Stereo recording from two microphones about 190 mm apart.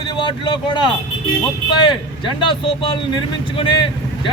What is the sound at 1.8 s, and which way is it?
Speech, 25° left (ahead or behind).